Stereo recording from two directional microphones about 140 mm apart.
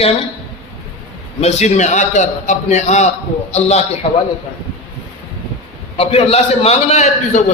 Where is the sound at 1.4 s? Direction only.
55° left (ahead or behind).